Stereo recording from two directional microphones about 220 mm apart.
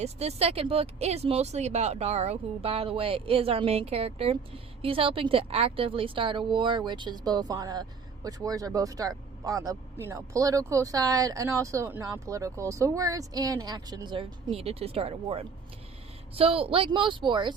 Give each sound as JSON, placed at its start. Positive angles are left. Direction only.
{"t": 0.0, "sound": "speech", "side_deg": -30}